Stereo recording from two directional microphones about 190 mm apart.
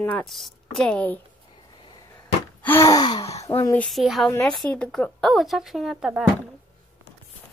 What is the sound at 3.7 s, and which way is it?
Speech, centre (ahead or behind).